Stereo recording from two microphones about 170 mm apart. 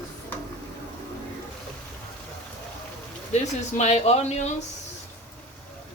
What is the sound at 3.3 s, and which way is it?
Speech, 40° left (ahead or behind).